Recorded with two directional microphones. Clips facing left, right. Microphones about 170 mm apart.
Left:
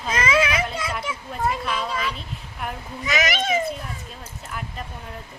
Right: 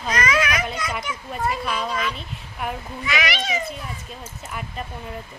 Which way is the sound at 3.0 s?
45° left (ahead or behind).